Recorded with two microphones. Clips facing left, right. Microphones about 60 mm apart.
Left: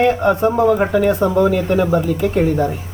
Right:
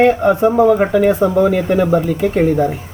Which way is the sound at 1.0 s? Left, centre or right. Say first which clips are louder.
Right 3 dB; centre.